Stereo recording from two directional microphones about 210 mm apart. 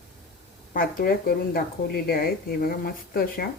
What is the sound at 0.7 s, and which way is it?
A woman's voice, 45° left (ahead or behind).